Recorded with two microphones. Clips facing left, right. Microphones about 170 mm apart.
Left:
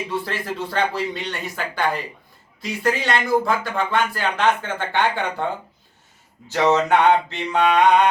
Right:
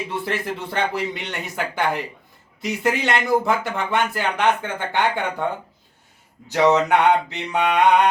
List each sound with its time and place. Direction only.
0.3 s speech: 20° right (ahead or behind)
6.5 s mantra: 15° right (ahead or behind)